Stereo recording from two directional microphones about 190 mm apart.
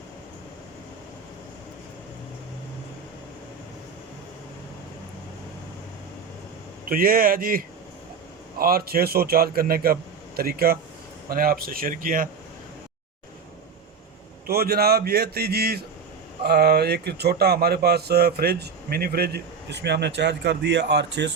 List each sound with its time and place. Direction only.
6.8 s a man's voice: 50° right (ahead or behind)
14.4 s speech: 55° right (ahead or behind)